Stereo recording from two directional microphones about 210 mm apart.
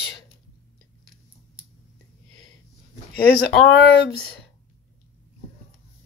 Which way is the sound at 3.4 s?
60° left (ahead or behind).